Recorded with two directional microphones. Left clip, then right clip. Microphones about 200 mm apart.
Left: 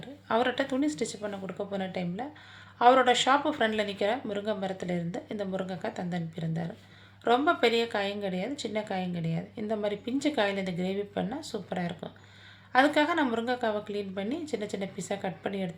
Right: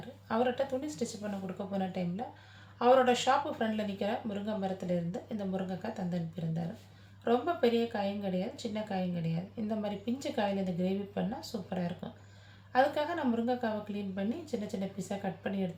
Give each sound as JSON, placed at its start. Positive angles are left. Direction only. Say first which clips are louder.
{"t": 0.3, "sound": "speech", "louder": "left 4 dB", "side_deg": 40}